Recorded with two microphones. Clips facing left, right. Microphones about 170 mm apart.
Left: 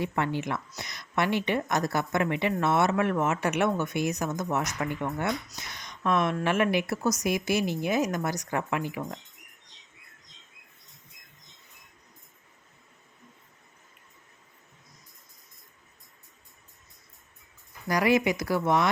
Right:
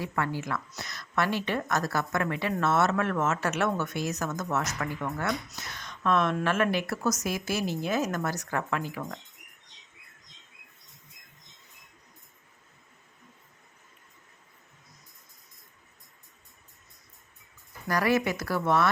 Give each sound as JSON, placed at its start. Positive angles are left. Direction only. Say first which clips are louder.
{"t": 0.0, "sound": "speech", "louder": "left 2 dB", "side_deg": 20}
{"t": 17.8, "sound": "speech", "louder": "left 2 dB", "side_deg": 15}